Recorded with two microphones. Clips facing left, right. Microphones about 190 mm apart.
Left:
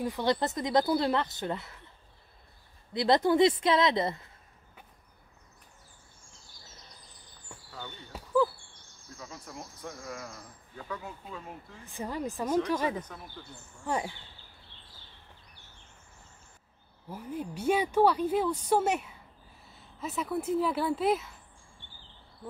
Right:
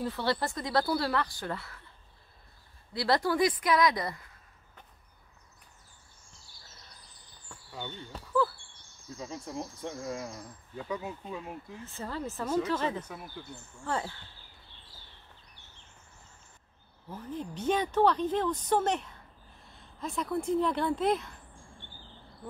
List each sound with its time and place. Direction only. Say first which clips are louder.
0.0 s speech: left 2 dB; 15° left (ahead or behind)
2.9 s speech: left 4 dB; 20° left (ahead or behind)
8.1 s basketball bounce: left 1 dB; 10° left (ahead or behind)
9.2 s speech: right 6 dB; 25° right (ahead or behind)
11.8 s speech: left 3 dB; 15° left (ahead or behind)
13.0 s speech: right 2 dB; 10° right (ahead or behind)
13.8 s speech: left 2 dB; 15° left (ahead or behind)
17.1 s speech: left 1 dB; 10° left (ahead or behind)